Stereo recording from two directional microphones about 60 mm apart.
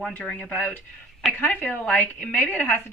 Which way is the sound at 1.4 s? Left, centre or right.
Left.